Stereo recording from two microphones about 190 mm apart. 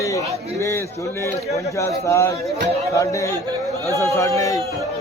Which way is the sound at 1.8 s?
15° left (ahead or behind).